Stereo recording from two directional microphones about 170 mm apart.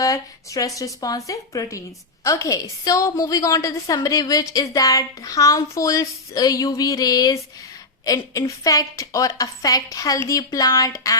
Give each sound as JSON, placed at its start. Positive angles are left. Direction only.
{"t": 0.0, "sound": "a woman's voice", "side_deg": 20}